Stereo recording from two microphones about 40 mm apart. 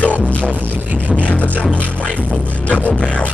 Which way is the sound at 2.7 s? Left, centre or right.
Left.